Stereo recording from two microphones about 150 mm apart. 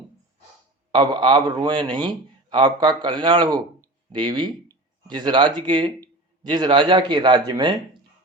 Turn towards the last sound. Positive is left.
turn(degrees=-30)  # may be behind; listen again after turning